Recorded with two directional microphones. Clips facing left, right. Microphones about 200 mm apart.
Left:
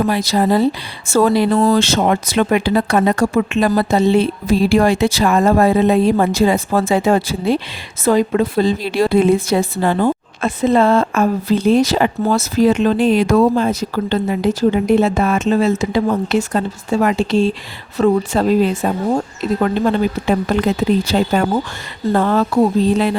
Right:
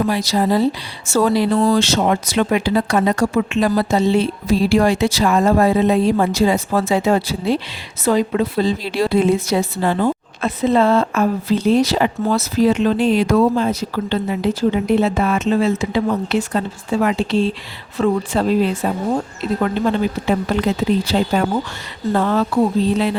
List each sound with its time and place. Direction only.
0.1 s a woman's voice: 55° left (ahead or behind)
20.5 s a woman's voice: 50° left (ahead or behind)